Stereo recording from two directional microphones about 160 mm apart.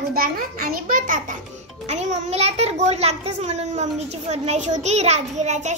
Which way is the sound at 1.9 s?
45° right (ahead or behind).